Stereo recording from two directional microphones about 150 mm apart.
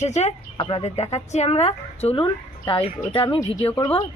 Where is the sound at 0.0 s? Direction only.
50° left (ahead or behind).